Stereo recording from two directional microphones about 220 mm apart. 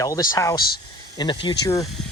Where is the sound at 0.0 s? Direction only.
15° left (ahead or behind).